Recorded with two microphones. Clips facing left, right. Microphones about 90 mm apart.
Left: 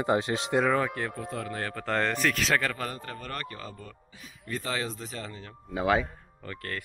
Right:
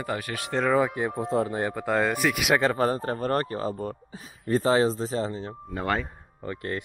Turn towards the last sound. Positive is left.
turn(degrees=-20)  # may be behind; listen again after turning